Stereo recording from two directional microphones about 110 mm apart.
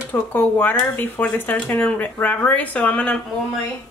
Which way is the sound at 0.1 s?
15° left (ahead or behind).